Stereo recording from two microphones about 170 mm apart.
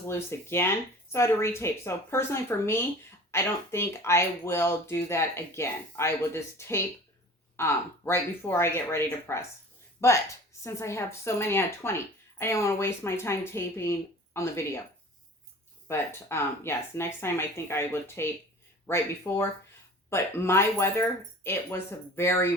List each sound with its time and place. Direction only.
0.1 s speech: 15° left (ahead or behind)
15.9 s speech: 15° left (ahead or behind)